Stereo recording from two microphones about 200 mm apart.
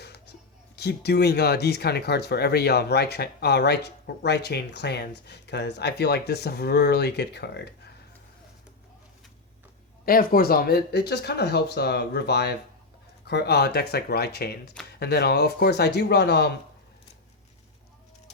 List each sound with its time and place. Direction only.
0.0 s music: 55° left (ahead or behind)
0.8 s speech: 55° left (ahead or behind)
10.1 s speech: 45° left (ahead or behind)